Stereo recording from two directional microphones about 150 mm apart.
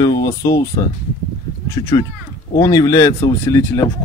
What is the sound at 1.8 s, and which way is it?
Speech, 25° left (ahead or behind).